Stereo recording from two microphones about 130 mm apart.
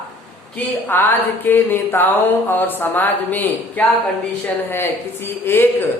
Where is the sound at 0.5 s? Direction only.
15° left (ahead or behind).